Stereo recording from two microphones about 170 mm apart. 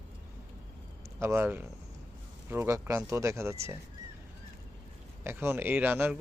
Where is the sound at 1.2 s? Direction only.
15° right (ahead or behind).